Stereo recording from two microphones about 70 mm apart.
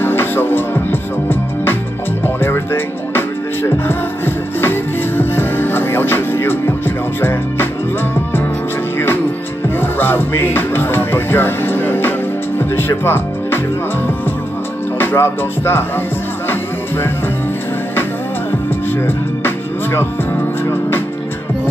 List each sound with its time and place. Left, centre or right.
0.0 s music: left
7.2 s speech: left
9.8 s music: left
15.0 s music: left
18.9 s music: left